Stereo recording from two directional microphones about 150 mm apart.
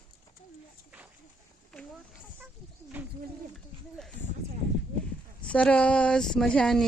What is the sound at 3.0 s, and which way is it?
Bird, 10° right (ahead or behind).